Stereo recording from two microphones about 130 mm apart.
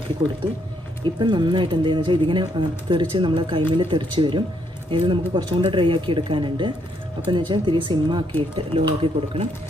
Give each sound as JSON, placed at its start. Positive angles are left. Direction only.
{"t": 0.2, "sound": "speech", "side_deg": -35}